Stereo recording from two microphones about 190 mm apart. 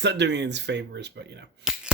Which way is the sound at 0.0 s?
65° right (ahead or behind).